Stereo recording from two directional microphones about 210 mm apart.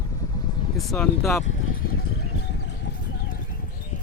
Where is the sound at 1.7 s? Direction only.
45° left (ahead or behind).